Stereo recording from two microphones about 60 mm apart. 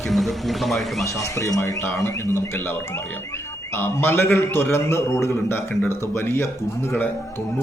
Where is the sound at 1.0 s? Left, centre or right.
Left.